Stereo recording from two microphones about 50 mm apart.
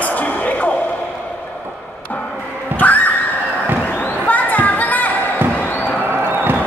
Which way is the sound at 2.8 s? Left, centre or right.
Left.